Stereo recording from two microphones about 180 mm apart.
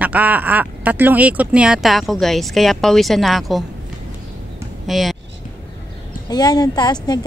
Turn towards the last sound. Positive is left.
turn(degrees=20)  # may be behind; listen again after turning